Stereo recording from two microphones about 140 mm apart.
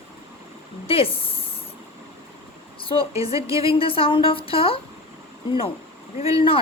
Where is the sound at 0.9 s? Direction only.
40° left (ahead or behind).